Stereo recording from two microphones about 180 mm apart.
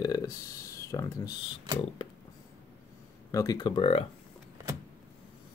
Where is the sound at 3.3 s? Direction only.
20° left (ahead or behind).